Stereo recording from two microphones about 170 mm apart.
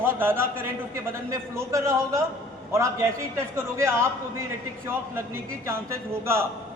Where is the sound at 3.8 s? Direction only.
15° right (ahead or behind).